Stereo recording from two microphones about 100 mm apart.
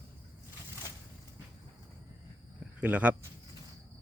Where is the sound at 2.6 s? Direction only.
15° right (ahead or behind).